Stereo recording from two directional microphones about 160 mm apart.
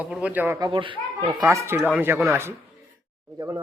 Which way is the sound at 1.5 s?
15° right (ahead or behind).